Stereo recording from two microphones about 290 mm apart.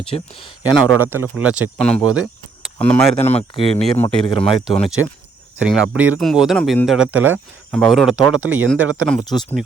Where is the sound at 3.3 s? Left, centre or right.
Centre.